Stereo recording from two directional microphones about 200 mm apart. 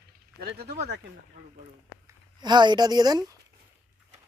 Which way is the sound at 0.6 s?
55° right (ahead or behind).